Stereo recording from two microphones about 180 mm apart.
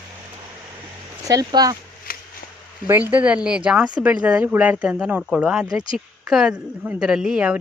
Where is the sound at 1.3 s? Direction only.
20° right (ahead or behind).